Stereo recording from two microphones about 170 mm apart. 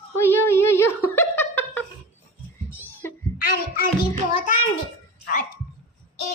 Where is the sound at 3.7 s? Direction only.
60° left (ahead or behind).